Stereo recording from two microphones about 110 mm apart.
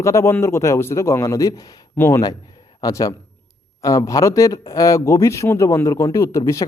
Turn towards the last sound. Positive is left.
turn(degrees=25)  # may be behind; listen again after turning